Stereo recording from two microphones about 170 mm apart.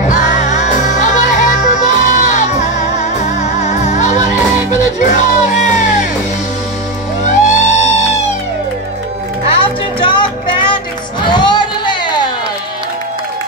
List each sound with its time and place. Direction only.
1.0 s music: 45° left (ahead or behind)
7.2 s music: 45° left (ahead or behind)
9.5 s music: 30° left (ahead or behind)